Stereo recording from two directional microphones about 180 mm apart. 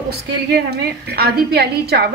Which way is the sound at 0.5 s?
65° right (ahead or behind).